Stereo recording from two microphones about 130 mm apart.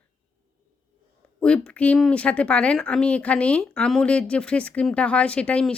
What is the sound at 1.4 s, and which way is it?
A woman's voice, 10° left (ahead or behind).